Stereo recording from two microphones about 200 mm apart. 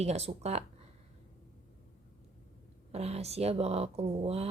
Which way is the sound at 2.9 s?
30° right (ahead or behind).